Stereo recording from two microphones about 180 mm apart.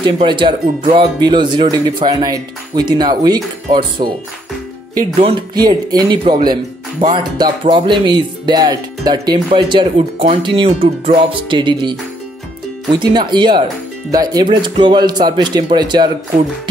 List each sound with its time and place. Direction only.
0.0 s speech: 25° right (ahead or behind)
5.2 s speech: 25° right (ahead or behind)